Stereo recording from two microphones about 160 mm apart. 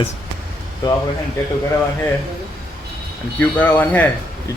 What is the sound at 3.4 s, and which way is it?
Speech, 10° left (ahead or behind).